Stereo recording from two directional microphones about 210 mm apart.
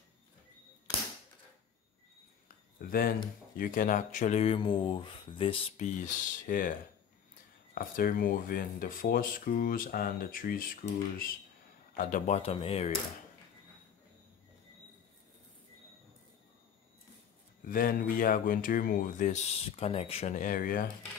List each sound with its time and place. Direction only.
2.4 s a sound: 45° left (ahead or behind)
3.5 s speech: 40° left (ahead or behind); by 5.9 s 25° left (ahead or behind)
6.0 s speech: 40° left (ahead or behind)
7.7 s speech: 40° left (ahead or behind)
17.6 s speech: 40° left (ahead or behind)